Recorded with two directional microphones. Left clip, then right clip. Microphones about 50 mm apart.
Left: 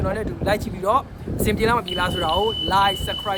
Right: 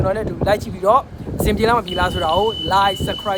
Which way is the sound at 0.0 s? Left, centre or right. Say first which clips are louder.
Right 5 dB; right.